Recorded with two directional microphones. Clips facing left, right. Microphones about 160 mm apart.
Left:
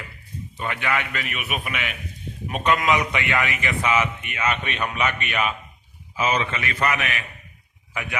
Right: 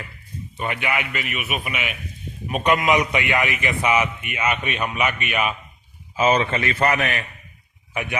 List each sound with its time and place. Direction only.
0.6 s a man's voice: 20° right (ahead or behind)
2.5 s a man's voice: 20° right (ahead or behind)
6.1 s a man's voice: 30° right (ahead or behind)